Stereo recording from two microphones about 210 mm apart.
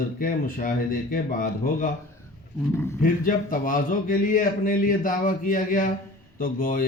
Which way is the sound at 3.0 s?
40° left (ahead or behind).